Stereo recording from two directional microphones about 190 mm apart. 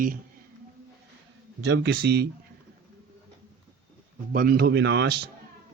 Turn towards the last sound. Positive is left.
turn(degrees=-60)  # may be behind; listen again after turning